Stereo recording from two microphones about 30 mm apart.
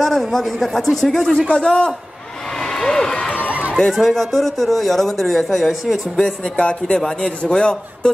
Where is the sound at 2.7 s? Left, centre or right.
Centre.